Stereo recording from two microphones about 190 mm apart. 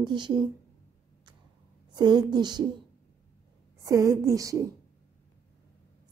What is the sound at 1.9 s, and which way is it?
Speech, 20° right (ahead or behind).